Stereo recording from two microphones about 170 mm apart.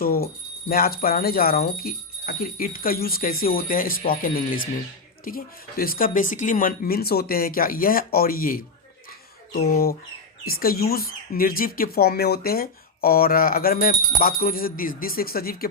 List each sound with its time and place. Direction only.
0.0 s speech: 60° left (ahead or behind)